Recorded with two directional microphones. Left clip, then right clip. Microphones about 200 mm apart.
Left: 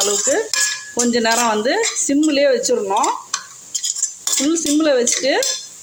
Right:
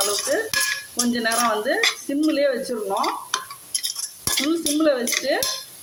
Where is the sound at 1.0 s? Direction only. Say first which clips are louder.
Left 6 dB; 40° left (ahead or behind).